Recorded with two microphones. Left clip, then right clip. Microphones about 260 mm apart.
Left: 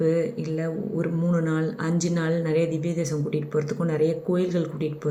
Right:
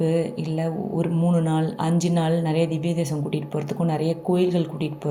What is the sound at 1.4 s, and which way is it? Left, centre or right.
Speech, centre.